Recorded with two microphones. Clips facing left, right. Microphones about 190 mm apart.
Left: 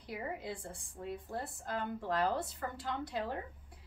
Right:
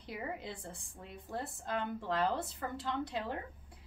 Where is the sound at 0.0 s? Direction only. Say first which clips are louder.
Left 1 dB; 20° right (ahead or behind).